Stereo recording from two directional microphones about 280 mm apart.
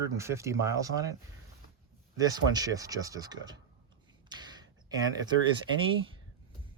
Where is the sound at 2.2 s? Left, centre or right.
Centre.